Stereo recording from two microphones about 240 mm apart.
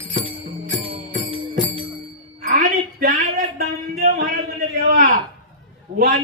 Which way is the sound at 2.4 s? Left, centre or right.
Right.